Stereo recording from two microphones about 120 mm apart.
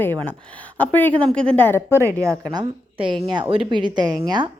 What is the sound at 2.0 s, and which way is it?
A woman's voice, 25° right (ahead or behind).